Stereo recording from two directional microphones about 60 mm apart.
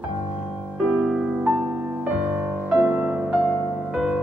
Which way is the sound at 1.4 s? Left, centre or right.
Right.